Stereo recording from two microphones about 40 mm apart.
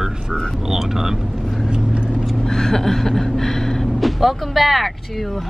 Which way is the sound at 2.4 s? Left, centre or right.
Centre.